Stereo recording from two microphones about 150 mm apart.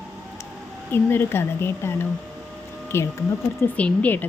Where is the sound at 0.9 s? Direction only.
15° left (ahead or behind).